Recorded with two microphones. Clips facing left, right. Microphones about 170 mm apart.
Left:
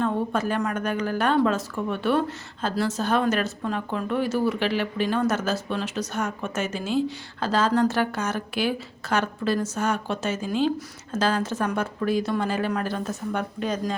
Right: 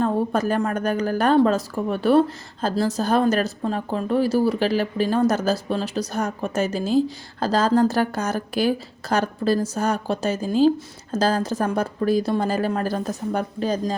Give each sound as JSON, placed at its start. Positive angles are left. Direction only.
{"t": 0.0, "sound": "a woman's voice", "side_deg": -40}